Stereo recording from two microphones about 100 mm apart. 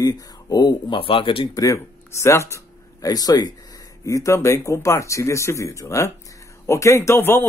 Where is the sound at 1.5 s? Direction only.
35° left (ahead or behind).